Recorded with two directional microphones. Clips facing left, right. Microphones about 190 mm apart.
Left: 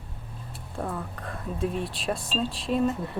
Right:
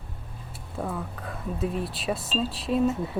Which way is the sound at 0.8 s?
Centre (ahead or behind).